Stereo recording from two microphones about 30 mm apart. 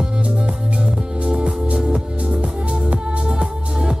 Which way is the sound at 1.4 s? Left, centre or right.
Right.